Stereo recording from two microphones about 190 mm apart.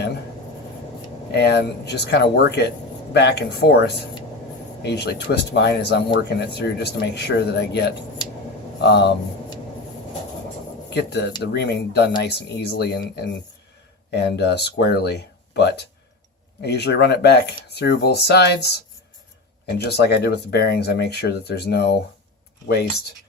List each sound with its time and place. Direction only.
1.3 s speech: 60° left (ahead or behind)
10.8 s speech: 60° left (ahead or behind)